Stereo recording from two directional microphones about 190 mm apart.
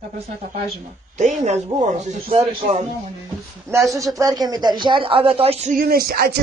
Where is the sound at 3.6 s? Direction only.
15° right (ahead or behind); by 5.7 s 30° right (ahead or behind).